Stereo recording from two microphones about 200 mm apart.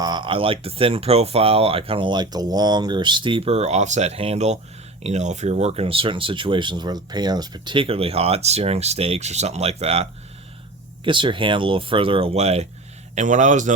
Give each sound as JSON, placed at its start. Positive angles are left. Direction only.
{"t": 0.0, "sound": "a man's voice", "side_deg": -20}